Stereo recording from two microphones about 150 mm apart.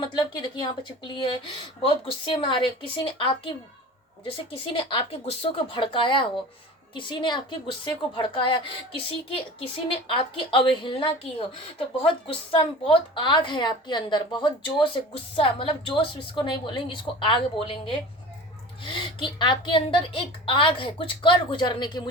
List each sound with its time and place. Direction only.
0.0 s speech: 30° left (ahead or behind)
10.1 s speech: 35° left (ahead or behind)